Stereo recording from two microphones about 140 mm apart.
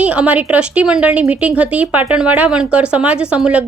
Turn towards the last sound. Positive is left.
turn(degrees=-10)  # may be behind; listen again after turning